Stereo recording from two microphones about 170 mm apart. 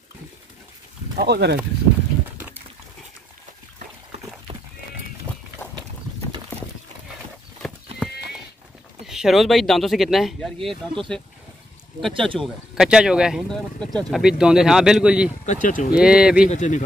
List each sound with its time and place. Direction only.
1.1 s speech: 75° right (ahead or behind)
7.6 s clip-clop: centre (ahead or behind)
8.0 s livestock: 5° left (ahead or behind)
9.0 s speech: 5° right (ahead or behind)
12.1 s speech: 30° right (ahead or behind)
12.4 s speech: 5° right (ahead or behind)
15.4 s speech: 50° left (ahead or behind)
15.9 s speech: 5° right (ahead or behind)
16.4 s speech: 45° left (ahead or behind)